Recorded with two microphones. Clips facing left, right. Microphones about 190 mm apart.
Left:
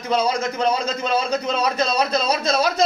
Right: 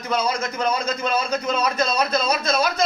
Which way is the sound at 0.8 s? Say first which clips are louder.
Left 1 dB; 30° left (ahead or behind).